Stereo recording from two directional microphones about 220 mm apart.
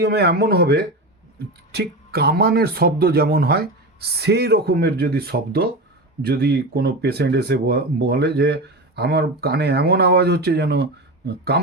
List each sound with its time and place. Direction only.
0.0 s speech: 50° right (ahead or behind)